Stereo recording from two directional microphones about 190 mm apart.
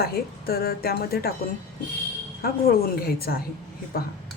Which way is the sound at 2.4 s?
50° left (ahead or behind).